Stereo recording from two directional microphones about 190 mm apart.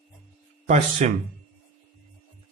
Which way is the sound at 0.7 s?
35° right (ahead or behind).